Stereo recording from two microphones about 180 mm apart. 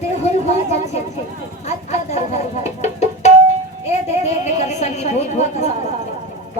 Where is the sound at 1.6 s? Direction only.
40° left (ahead or behind).